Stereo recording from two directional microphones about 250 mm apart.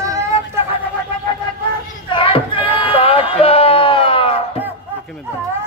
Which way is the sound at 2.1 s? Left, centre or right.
Left.